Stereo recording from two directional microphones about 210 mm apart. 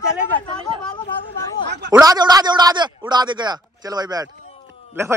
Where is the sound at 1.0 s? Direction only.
20° left (ahead or behind).